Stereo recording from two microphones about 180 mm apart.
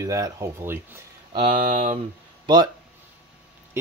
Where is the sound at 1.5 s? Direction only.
45° right (ahead or behind).